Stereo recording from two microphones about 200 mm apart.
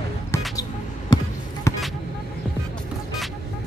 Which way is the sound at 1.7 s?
15° left (ahead or behind).